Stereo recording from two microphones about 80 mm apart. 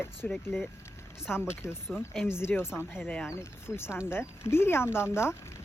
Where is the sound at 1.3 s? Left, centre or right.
Left.